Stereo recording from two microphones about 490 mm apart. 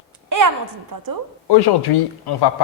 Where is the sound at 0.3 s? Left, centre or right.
Right.